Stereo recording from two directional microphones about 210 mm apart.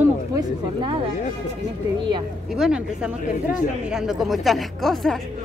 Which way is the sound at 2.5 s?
5° right (ahead or behind).